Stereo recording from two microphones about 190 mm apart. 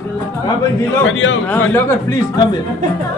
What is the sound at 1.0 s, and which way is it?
Speech, 85° left.